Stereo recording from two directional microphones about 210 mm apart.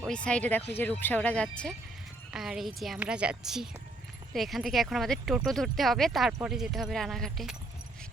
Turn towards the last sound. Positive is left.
turn(degrees=0)  # may be behind; listen again after turning